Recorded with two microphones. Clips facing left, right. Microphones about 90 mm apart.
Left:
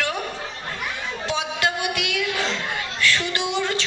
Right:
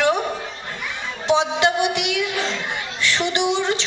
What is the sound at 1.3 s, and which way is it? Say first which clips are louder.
A woman's voice: right 7 dB; 25° right (ahead or behind).